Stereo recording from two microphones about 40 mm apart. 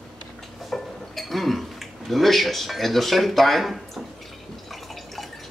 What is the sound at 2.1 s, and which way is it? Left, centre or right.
Speech, centre.